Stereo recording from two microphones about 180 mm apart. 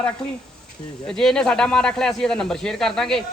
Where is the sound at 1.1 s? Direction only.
5° left (ahead or behind).